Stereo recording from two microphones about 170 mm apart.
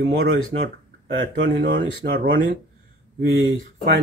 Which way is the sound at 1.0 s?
80° right.